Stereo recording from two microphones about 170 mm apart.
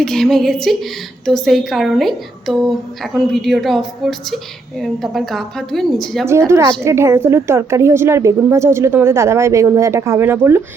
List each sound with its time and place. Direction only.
0.0 s a woman's voice: centre (ahead or behind)
6.8 s a woman's voice: 15° right (ahead or behind)